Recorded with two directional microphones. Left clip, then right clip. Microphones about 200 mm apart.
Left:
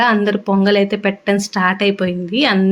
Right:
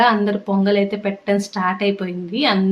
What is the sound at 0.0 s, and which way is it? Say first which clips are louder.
Speech: left 1 dB; 30° left (ahead or behind).